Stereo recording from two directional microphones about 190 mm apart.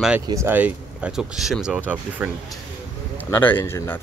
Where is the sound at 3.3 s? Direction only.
10° left (ahead or behind).